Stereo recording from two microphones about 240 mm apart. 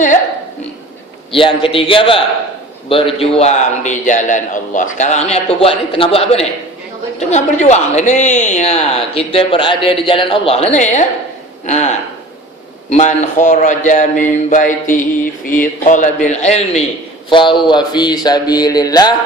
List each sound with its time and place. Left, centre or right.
1.3 s a woman's voice: left
3.2 s a man's voice: left
17.2 s a sound: centre